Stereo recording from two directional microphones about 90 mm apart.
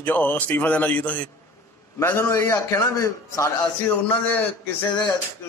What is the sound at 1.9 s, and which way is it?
A man's voice, 25° left (ahead or behind).